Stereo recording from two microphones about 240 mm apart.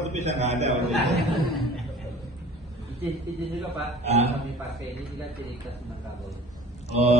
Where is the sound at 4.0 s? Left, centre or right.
Right.